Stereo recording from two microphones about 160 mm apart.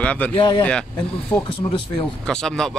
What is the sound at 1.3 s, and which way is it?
Speech, 10° left (ahead or behind).